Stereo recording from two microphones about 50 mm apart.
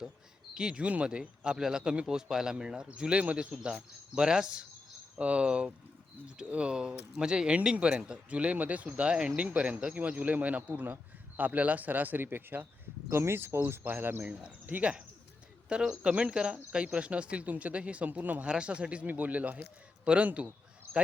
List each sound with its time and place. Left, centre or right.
0.5 s a man's voice: centre
4.1 s a man's voice: centre; by 12.6 s right
13.1 s speech: right
14.7 s speech: right
15.7 s speech: centre
18.4 s speech: right